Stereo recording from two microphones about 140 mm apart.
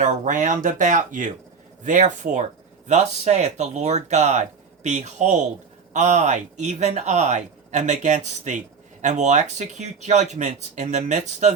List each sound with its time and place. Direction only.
0.0 s speech: 60° right (ahead or behind)